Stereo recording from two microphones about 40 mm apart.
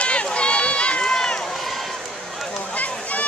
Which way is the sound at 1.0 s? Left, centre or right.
Centre.